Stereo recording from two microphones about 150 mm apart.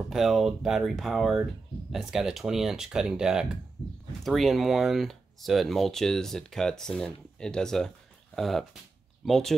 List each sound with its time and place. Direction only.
0.1 s speech: centre (ahead or behind)